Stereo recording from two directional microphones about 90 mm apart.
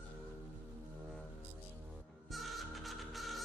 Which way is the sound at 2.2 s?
Centre (ahead or behind).